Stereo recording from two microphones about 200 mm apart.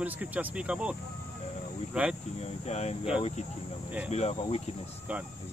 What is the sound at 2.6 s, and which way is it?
Speech, 35° left (ahead or behind).